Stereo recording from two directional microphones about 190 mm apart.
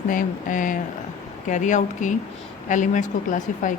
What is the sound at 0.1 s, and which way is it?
A woman's voice, 45° left (ahead or behind).